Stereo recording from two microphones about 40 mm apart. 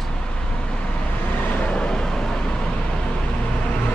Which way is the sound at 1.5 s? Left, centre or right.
Left.